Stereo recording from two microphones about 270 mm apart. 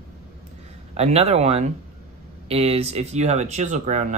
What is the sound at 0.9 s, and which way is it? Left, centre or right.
Speech, right.